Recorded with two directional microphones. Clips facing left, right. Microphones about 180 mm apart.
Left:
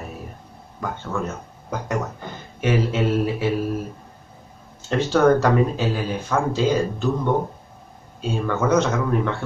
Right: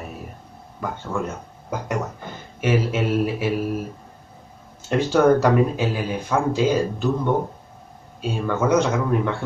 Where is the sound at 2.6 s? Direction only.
10° right (ahead or behind).